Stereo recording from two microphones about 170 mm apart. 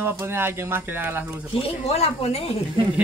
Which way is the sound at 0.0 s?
15° right (ahead or behind).